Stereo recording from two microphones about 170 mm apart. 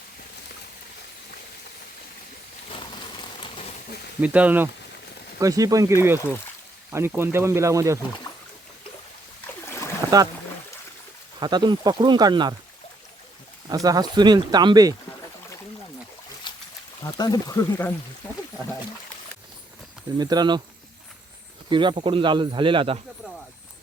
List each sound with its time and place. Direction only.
2.6 s a sound: 30° left (ahead or behind)
4.2 s speech: 10° right (ahead or behind)
5.4 s speech: 20° right (ahead or behind)
9.6 s boat: 15° left (ahead or behind)
11.3 s speech: 25° right (ahead or behind)
13.7 s speech: 20° right (ahead or behind)
16.5 s a sound: 25° left (ahead or behind)
17.0 s speech: 25° left (ahead or behind)
20.1 s speech: 25° right (ahead or behind)
21.7 s speech: 30° right (ahead or behind)